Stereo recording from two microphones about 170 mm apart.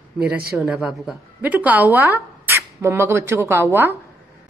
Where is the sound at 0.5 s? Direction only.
5° right (ahead or behind).